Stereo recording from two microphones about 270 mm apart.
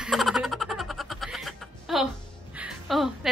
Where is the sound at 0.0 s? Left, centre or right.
Centre.